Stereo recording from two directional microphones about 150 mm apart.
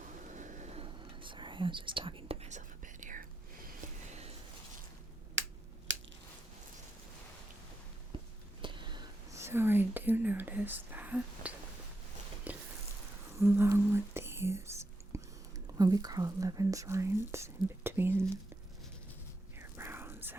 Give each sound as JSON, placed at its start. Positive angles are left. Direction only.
{"t": 0.3, "sound": "whispering", "side_deg": -55}
{"t": 8.1, "sound": "a sound", "side_deg": -35}
{"t": 9.3, "sound": "speech", "side_deg": -15}
{"t": 12.5, "sound": "a sound", "side_deg": -10}
{"t": 13.4, "sound": "speech", "side_deg": -15}
{"t": 19.5, "sound": "whispering", "side_deg": -15}